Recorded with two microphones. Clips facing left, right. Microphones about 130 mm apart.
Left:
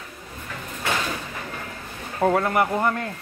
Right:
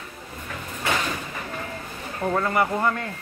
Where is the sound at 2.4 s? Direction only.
10° left (ahead or behind).